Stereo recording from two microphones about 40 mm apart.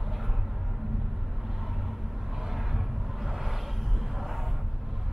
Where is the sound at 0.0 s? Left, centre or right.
Centre.